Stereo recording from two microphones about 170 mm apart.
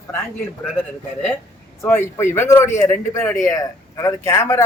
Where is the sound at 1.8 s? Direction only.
15° left (ahead or behind).